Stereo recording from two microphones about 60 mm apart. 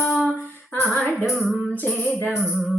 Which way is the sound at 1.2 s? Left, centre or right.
Centre.